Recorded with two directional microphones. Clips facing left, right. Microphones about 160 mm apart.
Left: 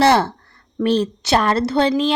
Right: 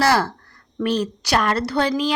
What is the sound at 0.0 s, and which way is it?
A woman's voice, 25° left (ahead or behind).